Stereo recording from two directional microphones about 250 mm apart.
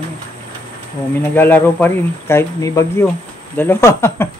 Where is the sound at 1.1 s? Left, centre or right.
Centre.